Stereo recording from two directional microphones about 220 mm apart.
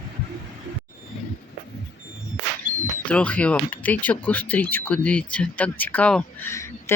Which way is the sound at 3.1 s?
5° left (ahead or behind).